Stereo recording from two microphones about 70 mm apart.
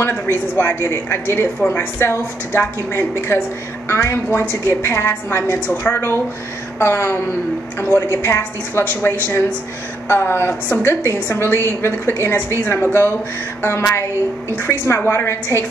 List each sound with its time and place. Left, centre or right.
0.1 s a woman's voice: left